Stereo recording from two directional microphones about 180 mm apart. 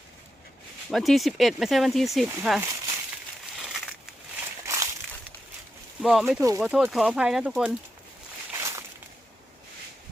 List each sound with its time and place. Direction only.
0.9 s speech: centre (ahead or behind)
3.6 s crushing: 5° right (ahead or behind)
4.6 s crumpling: 15° right (ahead or behind)
6.0 s speech: centre (ahead or behind)